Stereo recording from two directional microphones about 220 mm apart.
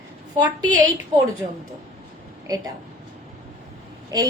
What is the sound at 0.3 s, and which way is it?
Speech, 20° right (ahead or behind).